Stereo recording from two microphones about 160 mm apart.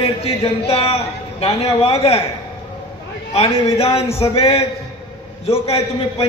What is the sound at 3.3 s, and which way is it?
A man's voice, 40° left (ahead or behind).